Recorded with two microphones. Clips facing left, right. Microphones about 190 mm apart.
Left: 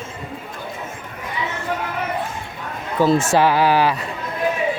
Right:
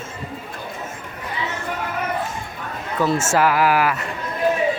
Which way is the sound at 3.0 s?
30° left (ahead or behind).